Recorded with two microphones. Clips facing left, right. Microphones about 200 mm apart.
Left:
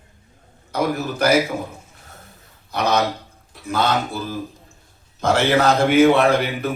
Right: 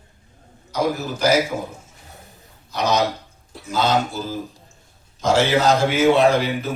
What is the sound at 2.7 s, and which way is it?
A man's voice, 55° left (ahead or behind).